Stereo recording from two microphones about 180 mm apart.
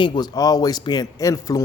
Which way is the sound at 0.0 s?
25° left (ahead or behind).